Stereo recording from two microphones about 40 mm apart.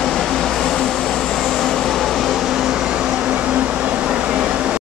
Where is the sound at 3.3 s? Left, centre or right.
Right.